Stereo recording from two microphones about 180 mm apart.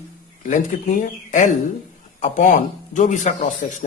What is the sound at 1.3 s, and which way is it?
Speech, 45° left (ahead or behind).